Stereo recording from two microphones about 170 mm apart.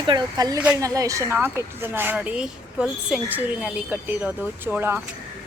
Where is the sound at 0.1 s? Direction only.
20° right (ahead or behind).